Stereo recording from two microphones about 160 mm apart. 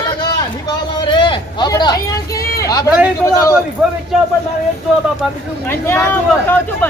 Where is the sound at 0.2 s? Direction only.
25° left (ahead or behind).